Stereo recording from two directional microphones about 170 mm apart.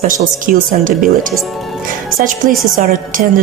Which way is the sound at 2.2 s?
50° right (ahead or behind).